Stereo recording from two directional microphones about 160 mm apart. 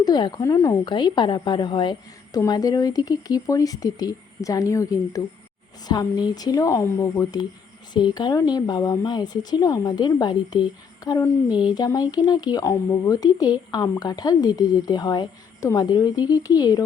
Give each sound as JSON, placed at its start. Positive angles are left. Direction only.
{"t": 0.0, "sound": "speech", "side_deg": 25}